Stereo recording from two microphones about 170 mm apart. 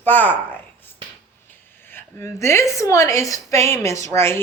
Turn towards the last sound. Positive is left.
turn(degrees=15)  # may be behind; listen again after turning